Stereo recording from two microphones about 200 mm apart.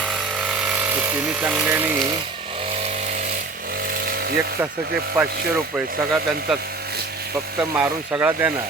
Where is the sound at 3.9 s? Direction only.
50° right (ahead or behind).